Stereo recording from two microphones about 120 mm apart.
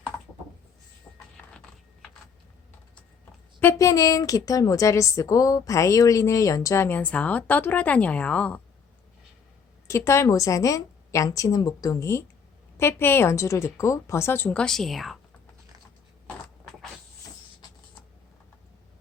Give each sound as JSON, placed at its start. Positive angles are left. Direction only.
{"t": 3.6, "sound": "a woman's voice", "side_deg": 20}
{"t": 9.8, "sound": "a woman's voice", "side_deg": 25}
{"t": 14.6, "sound": "speech", "side_deg": 0}